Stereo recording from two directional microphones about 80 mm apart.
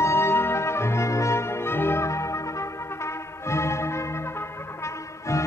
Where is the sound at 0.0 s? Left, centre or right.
Left.